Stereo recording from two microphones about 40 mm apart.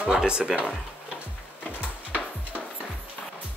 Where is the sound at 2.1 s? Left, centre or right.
Right.